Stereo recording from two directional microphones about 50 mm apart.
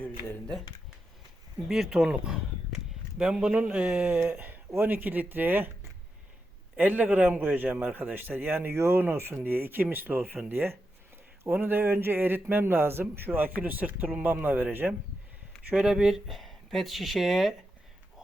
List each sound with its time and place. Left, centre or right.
1.6 s speech: centre
2.0 s speech: centre
3.5 s speech: right
4.8 s speech: right
6.7 s speech: right
13.6 s speech: right
15.7 s speech: centre